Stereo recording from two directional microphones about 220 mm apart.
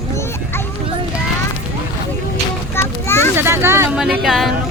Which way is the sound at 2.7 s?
10° left (ahead or behind).